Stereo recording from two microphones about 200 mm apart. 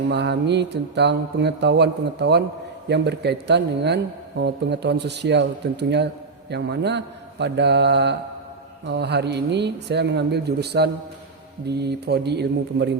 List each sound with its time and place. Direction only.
0.1 s a man's voice: 55° right (ahead or behind)